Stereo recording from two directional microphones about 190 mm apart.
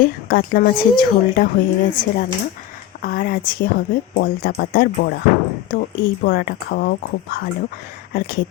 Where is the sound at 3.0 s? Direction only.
50° left (ahead or behind).